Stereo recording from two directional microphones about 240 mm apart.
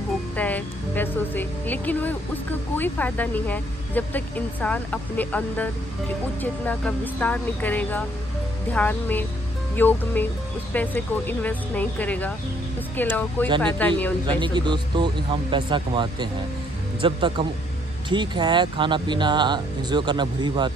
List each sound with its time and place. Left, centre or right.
0.4 s speech: centre
14.2 s speech: centre